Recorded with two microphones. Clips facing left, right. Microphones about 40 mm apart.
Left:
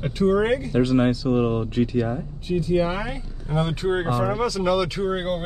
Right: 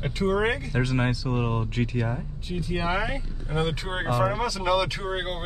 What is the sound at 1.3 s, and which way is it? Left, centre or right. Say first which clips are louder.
Speech: left 6 dB; centre.